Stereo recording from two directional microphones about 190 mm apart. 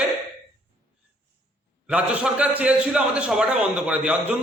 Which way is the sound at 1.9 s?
5° right (ahead or behind).